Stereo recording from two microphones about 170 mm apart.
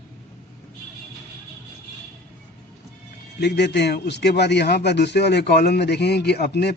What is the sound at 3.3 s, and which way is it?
A man's voice, 80° left.